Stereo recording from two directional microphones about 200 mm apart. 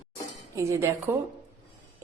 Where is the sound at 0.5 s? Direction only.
15° right (ahead or behind).